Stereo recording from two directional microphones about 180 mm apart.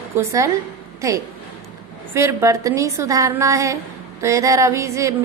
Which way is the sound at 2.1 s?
15° right (ahead or behind).